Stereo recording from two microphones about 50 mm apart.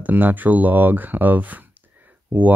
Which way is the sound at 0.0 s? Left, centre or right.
Right.